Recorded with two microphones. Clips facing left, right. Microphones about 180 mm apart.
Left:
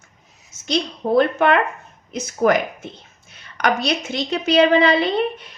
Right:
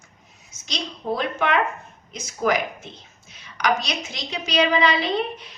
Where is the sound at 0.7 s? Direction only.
55° left (ahead or behind).